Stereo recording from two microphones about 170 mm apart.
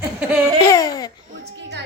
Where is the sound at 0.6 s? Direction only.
20° left (ahead or behind).